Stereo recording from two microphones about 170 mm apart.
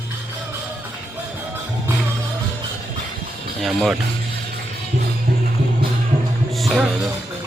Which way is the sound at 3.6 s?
Centre (ahead or behind).